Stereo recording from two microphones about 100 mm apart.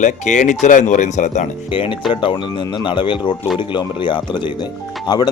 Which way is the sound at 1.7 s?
60° left (ahead or behind).